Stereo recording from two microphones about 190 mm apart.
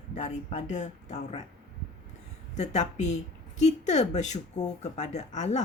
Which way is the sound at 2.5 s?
35° left (ahead or behind).